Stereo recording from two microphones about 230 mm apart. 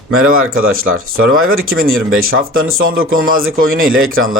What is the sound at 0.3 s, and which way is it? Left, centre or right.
Speech, right.